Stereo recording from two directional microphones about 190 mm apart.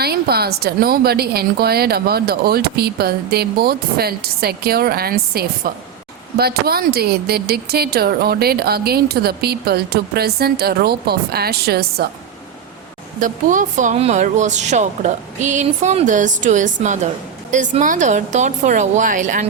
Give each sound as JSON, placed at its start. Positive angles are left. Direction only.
{"t": 0.0, "sound": "a woman's voice", "side_deg": -55}
{"t": 13.1, "sound": "speech", "side_deg": -45}